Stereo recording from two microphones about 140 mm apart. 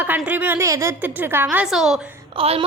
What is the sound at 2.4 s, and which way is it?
Speech, 40° right (ahead or behind).